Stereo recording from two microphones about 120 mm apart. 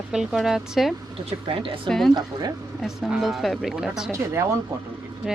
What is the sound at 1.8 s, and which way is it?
Speech, 5° left (ahead or behind).